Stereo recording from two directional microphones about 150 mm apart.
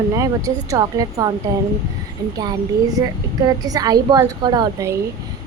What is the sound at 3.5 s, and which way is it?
A woman's voice, 25° right (ahead or behind).